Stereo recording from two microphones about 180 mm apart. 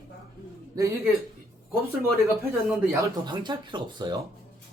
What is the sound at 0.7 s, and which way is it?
Speech, 20° right (ahead or behind).